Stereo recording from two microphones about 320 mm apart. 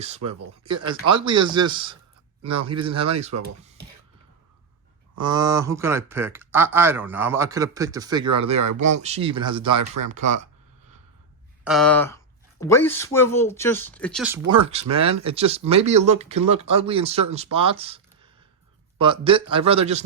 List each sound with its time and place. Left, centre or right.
0.3 s speech: centre
5.1 s speech: centre
9.7 s speech: right
10.1 s speech: right
11.6 s speech: centre
14.5 s speech: centre